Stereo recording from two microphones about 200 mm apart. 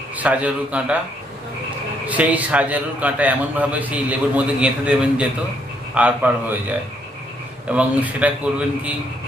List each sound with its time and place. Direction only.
0.2 s a man's voice: 5° right (ahead or behind)
2.0 s a man's voice: 5° right (ahead or behind)